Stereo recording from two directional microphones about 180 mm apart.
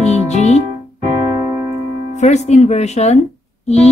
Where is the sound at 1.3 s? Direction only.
25° right (ahead or behind).